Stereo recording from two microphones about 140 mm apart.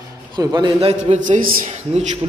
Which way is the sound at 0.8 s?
50° right (ahead or behind).